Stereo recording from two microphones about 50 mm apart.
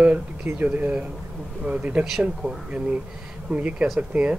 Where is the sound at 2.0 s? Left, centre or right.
Centre.